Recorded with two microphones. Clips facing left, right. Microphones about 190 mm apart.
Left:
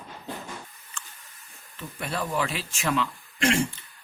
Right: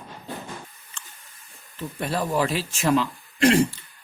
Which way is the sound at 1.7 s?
35° right (ahead or behind).